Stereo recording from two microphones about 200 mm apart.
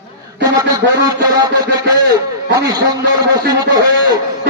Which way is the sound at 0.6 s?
20° right (ahead or behind).